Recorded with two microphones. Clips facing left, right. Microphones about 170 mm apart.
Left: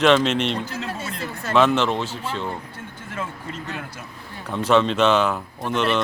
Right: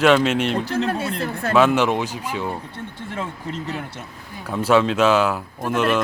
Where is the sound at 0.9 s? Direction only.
60° right (ahead or behind).